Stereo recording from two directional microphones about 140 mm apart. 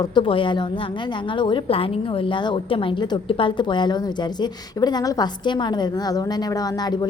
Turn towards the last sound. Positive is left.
turn(degrees=30)  # may be behind; listen again after turning